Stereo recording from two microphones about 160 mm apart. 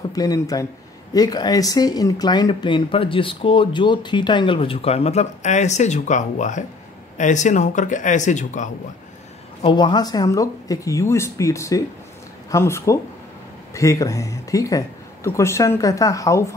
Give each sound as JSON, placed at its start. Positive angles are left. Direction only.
{"t": 0.1, "sound": "speech", "side_deg": 25}
{"t": 9.6, "sound": "speech", "side_deg": 30}